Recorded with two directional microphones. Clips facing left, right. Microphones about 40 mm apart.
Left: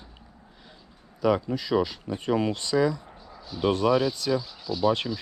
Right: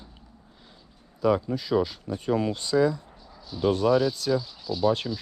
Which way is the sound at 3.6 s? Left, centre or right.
Left.